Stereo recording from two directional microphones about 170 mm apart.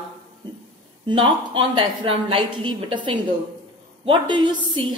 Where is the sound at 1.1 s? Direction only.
30° right (ahead or behind).